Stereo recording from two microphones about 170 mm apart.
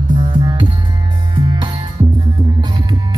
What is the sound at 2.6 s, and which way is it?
Music, 25° right (ahead or behind).